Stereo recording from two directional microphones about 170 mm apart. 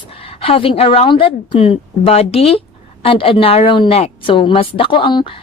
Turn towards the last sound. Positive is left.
turn(degrees=30)  # may be behind; listen again after turning